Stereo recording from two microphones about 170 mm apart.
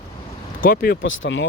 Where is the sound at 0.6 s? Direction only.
60° left (ahead or behind); by 1.5 s 90° left.